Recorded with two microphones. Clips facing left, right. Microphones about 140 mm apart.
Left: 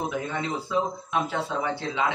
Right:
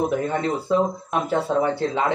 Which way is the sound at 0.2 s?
45° right (ahead or behind).